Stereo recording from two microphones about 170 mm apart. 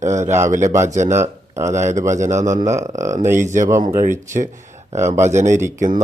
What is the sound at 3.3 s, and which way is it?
Speech, 45° right (ahead or behind).